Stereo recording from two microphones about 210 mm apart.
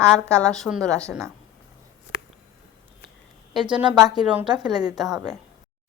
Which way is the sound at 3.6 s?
20° right (ahead or behind).